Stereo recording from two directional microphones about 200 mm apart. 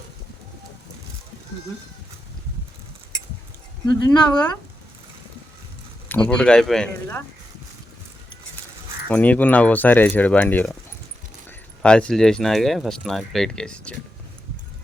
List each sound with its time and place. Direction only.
3.8 s speech: 20° left (ahead or behind)
6.2 s speech: 5° left (ahead or behind)
9.0 s speech: 5° left (ahead or behind)
11.8 s speech: 5° left (ahead or behind)